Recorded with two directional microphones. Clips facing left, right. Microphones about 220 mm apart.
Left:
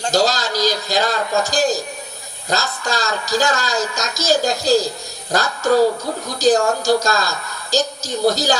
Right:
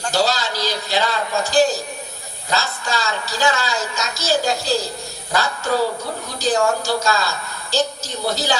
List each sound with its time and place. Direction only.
0.1 s a woman's voice: 40° left (ahead or behind)